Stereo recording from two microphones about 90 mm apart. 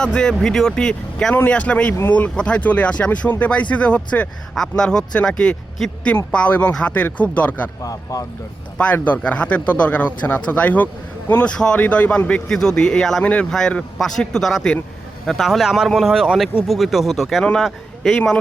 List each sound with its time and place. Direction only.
0.0 s speech: 10° left (ahead or behind)
7.8 s speech: 40° left (ahead or behind)
8.8 s speech: 15° left (ahead or behind)